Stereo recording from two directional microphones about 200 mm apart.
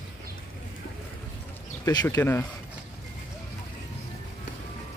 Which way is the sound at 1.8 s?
20° left (ahead or behind).